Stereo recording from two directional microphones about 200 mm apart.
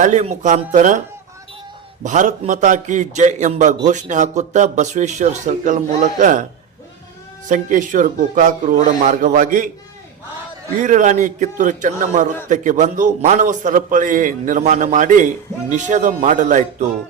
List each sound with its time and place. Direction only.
0.0 s a man's voice: 35° right (ahead or behind)
2.0 s a man's voice: 40° right (ahead or behind)
7.4 s a man's voice: 40° right (ahead or behind)
10.8 s a man's voice: 40° right (ahead or behind)